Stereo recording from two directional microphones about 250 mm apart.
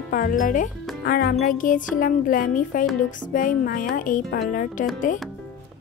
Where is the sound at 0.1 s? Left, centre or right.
Left.